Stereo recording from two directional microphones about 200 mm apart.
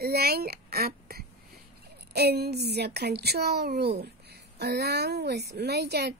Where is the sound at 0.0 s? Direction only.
50° right (ahead or behind).